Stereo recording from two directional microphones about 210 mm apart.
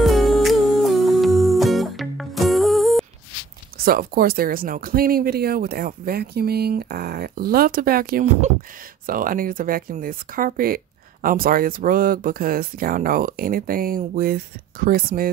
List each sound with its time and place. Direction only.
0.0 s music: centre (ahead or behind)
3.7 s speech: 45° right (ahead or behind)